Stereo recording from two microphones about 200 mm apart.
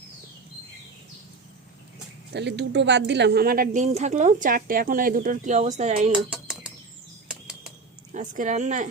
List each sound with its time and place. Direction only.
2.3 s speech: 60° right (ahead or behind); by 6.1 s 35° right (ahead or behind)
6.3 s bird: 5° right (ahead or behind)
7.3 s bird flight: 5° right (ahead or behind)
8.1 s speech: 40° right (ahead or behind)